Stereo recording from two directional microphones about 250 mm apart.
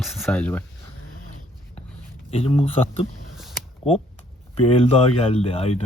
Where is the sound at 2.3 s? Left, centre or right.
Left.